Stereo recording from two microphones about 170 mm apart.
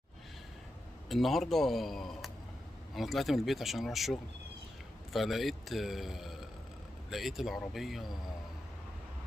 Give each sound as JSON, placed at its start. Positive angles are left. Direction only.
{"t": 1.0, "sound": "a man's voice", "side_deg": 0}